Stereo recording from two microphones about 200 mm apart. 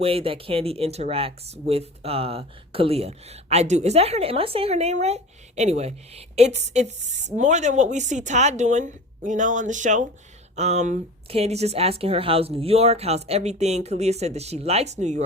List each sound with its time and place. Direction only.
0.0 s speech: 30° right (ahead or behind)